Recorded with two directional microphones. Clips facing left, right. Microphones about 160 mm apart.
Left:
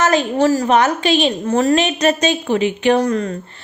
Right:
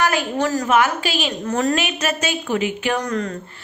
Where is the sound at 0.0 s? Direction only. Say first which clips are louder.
Left 5 dB; 25° left (ahead or behind).